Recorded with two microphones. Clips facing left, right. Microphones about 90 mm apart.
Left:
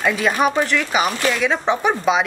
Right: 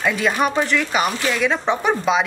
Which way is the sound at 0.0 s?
Centre (ahead or behind).